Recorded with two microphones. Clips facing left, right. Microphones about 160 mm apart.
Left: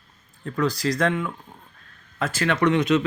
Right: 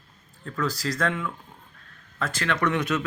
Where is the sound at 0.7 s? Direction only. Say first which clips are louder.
Left 5 dB; 5° right (ahead or behind).